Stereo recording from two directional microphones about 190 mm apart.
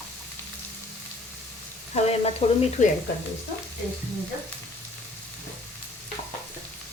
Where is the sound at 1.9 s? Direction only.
30° left (ahead or behind).